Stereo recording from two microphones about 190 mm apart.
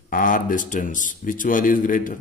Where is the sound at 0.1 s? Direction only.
45° left (ahead or behind).